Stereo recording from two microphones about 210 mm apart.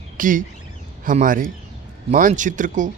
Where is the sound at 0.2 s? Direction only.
40° right (ahead or behind).